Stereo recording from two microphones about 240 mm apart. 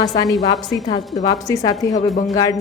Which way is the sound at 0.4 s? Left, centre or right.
Centre.